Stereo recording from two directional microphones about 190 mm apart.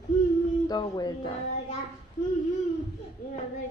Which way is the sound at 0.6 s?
20° left (ahead or behind).